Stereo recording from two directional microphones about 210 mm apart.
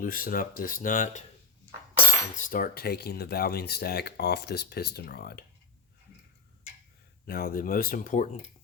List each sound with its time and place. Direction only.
0.0 s speech: 40° left (ahead or behind)
2.3 s speech: 40° left (ahead or behind)
7.3 s speech: 45° left (ahead or behind)